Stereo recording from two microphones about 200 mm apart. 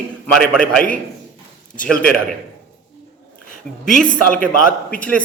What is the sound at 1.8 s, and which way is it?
Speech, 5° left (ahead or behind).